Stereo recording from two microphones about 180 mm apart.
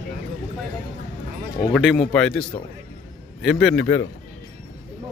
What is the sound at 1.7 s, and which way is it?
A man's voice, centre (ahead or behind).